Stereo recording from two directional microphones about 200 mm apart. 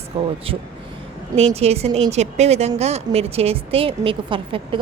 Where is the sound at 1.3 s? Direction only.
30° right (ahead or behind).